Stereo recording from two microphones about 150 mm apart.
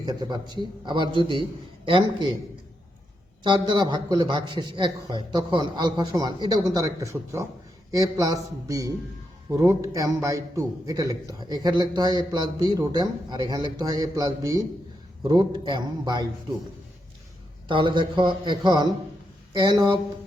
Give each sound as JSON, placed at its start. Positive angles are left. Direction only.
{"t": 0.0, "sound": "a man's voice", "side_deg": -25}
{"t": 3.4, "sound": "a man's voice", "side_deg": -30}
{"t": 17.7, "sound": "a man's voice", "side_deg": -35}